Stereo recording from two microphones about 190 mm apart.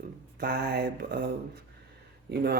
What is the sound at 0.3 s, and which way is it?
Speech, 55° right (ahead or behind).